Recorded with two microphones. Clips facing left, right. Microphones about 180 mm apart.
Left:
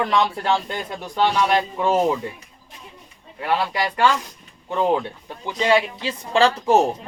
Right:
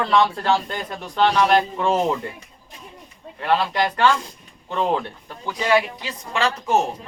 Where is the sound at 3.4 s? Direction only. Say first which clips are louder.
Right 2 dB; 10° left (ahead or behind); by 6.8 s 30° left (ahead or behind).